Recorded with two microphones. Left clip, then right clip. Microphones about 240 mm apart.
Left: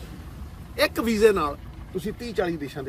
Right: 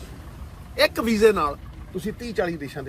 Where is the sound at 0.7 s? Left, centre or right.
Centre.